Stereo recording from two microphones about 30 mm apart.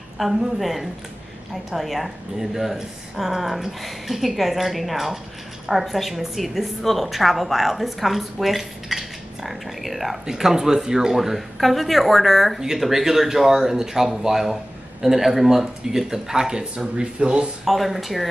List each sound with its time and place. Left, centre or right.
0.2 s a woman's voice: centre
7.1 s speech: centre
10.2 s speech: centre
11.1 s speech: centre
16.8 s speech: right
17.6 s speech: centre